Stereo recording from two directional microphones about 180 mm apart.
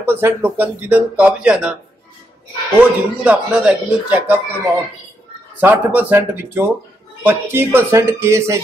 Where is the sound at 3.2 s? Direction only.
5° right (ahead or behind).